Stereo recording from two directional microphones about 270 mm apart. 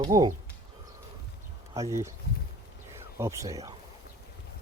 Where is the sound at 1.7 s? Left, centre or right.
Centre.